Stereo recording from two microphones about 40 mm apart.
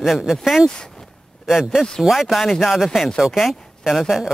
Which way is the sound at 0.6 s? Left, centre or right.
Centre.